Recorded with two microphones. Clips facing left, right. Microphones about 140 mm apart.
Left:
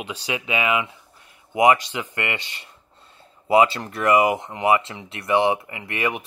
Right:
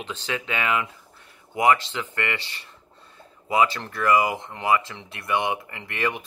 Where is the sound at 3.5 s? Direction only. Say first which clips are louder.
Left 5 dB; 30° left (ahead or behind).